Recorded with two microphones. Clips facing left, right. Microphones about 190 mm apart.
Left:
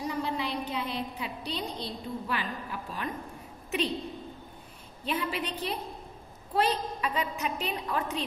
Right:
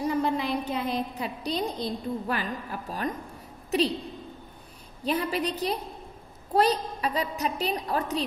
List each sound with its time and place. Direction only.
0.0 s a woman's voice: 50° right (ahead or behind)
5.0 s a woman's voice: 40° right (ahead or behind)